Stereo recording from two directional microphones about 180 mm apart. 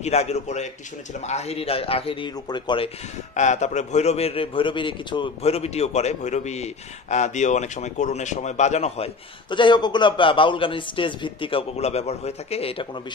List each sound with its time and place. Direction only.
0.0 s a man's voice: 35° left (ahead or behind)
3.3 s a man's voice: 40° left (ahead or behind)